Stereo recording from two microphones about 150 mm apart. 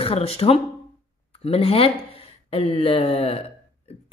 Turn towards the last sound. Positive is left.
turn(degrees=40)  # may be behind; listen again after turning